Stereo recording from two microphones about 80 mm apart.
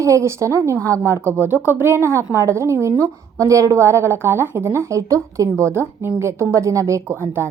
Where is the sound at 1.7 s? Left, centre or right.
Right.